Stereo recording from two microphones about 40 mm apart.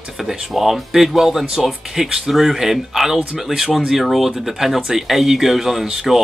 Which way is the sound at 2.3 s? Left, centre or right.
Centre.